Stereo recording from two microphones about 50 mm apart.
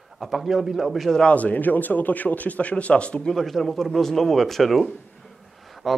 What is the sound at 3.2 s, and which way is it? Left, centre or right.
Speech, centre.